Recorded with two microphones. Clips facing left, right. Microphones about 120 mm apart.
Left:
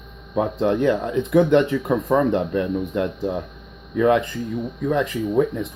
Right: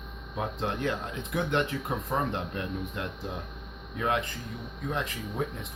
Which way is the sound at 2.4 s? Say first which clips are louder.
Left 12 dB; 55° left (ahead or behind).